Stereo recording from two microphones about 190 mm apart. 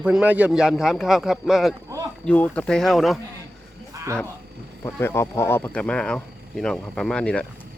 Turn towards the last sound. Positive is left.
turn(degrees=5)  # may be behind; listen again after turning